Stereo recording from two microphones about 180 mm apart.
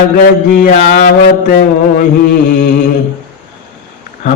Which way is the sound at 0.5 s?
50° left (ahead or behind).